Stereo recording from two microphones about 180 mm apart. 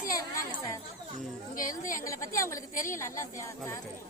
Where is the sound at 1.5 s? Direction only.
50° left (ahead or behind).